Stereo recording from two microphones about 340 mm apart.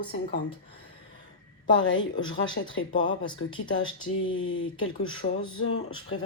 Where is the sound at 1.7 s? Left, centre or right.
Left.